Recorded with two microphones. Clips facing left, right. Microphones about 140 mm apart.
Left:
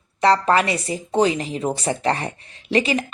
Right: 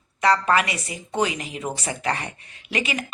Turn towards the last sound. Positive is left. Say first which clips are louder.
# left 7 dB
turn(degrees=35)  # may be behind; listen again after turning